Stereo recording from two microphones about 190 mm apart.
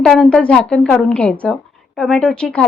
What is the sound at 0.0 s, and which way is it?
A woman's voice, 5° left (ahead or behind).